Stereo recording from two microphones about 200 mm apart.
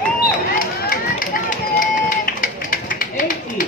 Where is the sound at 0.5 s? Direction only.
45° left (ahead or behind).